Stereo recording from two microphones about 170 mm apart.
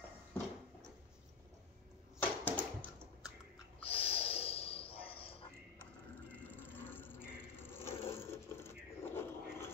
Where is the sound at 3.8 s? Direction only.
35° left (ahead or behind).